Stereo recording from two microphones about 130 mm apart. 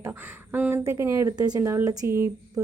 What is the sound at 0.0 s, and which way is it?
Speech, 15° right (ahead or behind).